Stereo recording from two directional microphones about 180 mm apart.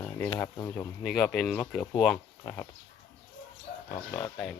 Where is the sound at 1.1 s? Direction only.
Centre (ahead or behind).